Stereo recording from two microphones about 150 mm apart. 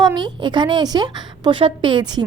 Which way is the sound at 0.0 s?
30° right (ahead or behind).